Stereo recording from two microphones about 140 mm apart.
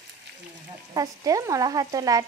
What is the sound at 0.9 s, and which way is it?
Frying, 25° right (ahead or behind).